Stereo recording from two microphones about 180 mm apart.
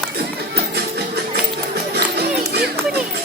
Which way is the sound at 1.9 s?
65° right (ahead or behind).